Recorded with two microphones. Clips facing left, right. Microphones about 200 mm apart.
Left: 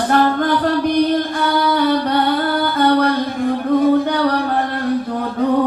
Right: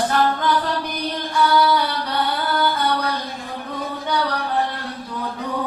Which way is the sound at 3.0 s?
50° left (ahead or behind).